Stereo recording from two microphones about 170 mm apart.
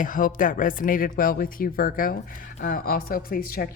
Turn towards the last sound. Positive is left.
turn(degrees=60)  # may be behind; listen again after turning